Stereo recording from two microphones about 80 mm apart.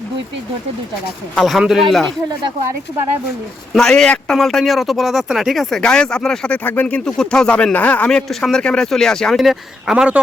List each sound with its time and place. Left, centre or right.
1.4 s speech: centre
3.8 s speech: centre
5.8 s a man's voice: centre
6.5 s speech: left
6.8 s a man's voice: centre
8.3 s speech: centre